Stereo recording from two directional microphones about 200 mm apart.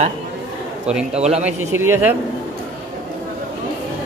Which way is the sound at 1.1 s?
35° right (ahead or behind).